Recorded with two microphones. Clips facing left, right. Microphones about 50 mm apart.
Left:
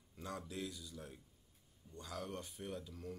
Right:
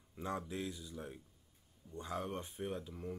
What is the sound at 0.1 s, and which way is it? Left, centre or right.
Speech, right.